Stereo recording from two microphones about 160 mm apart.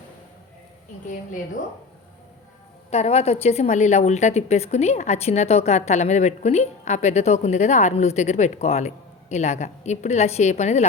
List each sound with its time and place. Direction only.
2.9 s a woman's voice: 40° left (ahead or behind)